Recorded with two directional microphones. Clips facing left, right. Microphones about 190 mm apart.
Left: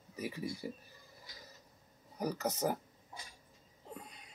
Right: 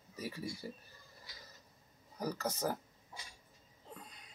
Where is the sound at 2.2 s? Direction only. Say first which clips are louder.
Left 2 dB; 15° left (ahead or behind).